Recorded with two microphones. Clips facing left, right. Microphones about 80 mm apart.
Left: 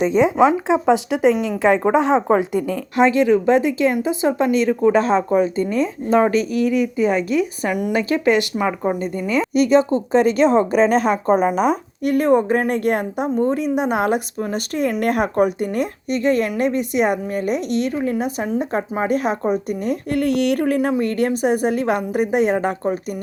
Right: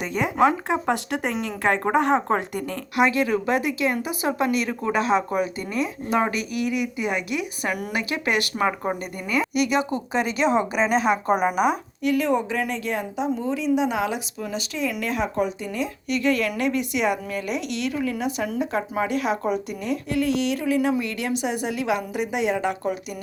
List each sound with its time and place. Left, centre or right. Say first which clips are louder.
0.1 s speech: left 2 dB; centre
2.9 s a woman's voice: left 6 dB; left
6.7 s speech: left 7 dB; centre
7.3 s speech: left 7 dB; left
8.5 s speech: left 4 dB; centre
9.6 s a woman's voice: left 11 dB; left